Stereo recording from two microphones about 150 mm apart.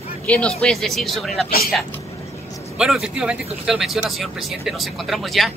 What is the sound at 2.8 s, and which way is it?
Speech, 5° right (ahead or behind).